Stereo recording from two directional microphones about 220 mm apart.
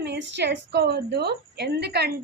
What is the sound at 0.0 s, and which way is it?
A woman's voice, 50° right (ahead or behind).